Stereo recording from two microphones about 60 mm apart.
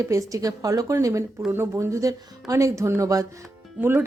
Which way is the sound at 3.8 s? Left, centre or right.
Right.